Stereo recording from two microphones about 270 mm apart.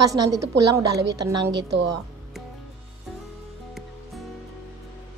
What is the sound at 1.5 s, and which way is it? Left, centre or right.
Speech, right.